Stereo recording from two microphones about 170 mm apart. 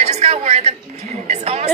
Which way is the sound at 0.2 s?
40° right (ahead or behind).